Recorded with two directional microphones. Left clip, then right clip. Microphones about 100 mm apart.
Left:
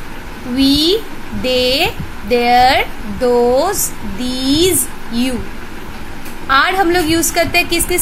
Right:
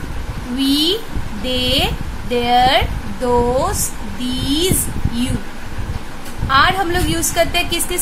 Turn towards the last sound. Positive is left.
turn(degrees=40)  # may be behind; listen again after turning